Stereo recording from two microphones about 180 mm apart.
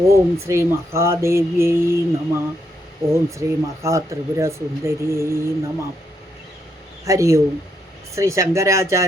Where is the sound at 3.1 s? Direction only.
15° right (ahead or behind).